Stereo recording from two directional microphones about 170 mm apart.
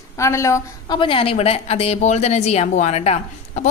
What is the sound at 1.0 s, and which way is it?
Speech, 30° left (ahead or behind).